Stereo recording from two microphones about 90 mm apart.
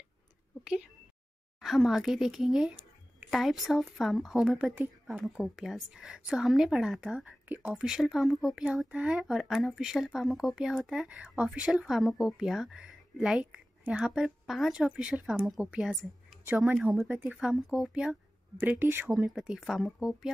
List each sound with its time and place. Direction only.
1.6 s speech: 5° right (ahead or behind)
7.4 s speech: 20° right (ahead or behind)
7.7 s speech: 5° right (ahead or behind)
16.4 s speech: 25° right (ahead or behind)
16.7 s speech: 5° right (ahead or behind)
17.1 s speech: 20° right (ahead or behind)
17.4 s speech: 5° right (ahead or behind)
18.6 s speech: 25° right (ahead or behind)
19.1 s speech: 10° right (ahead or behind)